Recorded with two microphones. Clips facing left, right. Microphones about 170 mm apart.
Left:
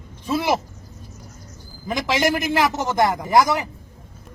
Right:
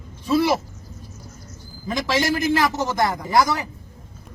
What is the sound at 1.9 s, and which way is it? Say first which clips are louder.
A man's voice: left 1 dB; 15° left (ahead or behind).